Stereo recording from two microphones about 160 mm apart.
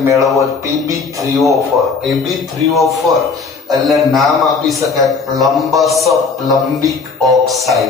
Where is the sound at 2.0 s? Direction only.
Centre (ahead or behind).